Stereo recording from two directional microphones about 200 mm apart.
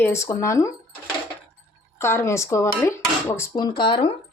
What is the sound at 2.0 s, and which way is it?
Speech, 10° left (ahead or behind).